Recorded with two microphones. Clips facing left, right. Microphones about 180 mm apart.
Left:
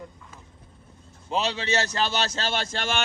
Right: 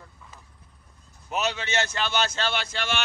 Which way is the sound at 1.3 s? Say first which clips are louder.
Left 2 dB; 30° left (ahead or behind).